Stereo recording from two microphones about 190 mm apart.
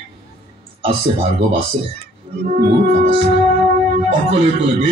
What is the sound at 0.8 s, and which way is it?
Speech, 30° right (ahead or behind).